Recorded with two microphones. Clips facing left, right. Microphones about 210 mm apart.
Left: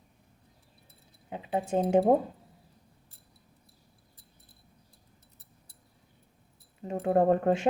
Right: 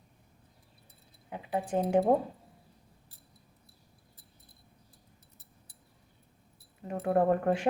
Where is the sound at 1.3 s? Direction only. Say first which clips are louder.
Left 2 dB; 25° left (ahead or behind).